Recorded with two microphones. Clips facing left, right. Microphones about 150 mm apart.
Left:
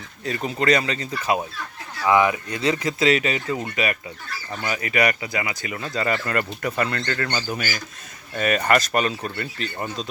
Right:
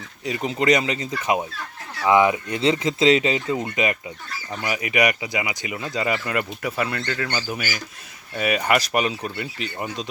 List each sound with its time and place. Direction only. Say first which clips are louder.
0.3 s speech: right 1 dB; 15° right (ahead or behind)